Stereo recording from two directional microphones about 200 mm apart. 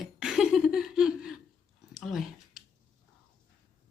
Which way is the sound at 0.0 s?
5° right (ahead or behind).